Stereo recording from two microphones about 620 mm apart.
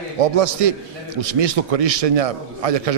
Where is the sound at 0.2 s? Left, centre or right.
Right.